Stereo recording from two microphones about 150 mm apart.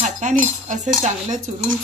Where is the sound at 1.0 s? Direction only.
50° right (ahead or behind).